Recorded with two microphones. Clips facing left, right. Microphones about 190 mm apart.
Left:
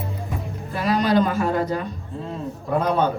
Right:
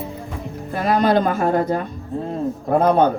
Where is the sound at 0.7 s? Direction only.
50° right (ahead or behind).